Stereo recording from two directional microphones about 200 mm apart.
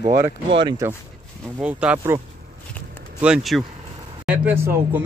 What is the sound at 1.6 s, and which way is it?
Speech, 5° right (ahead or behind).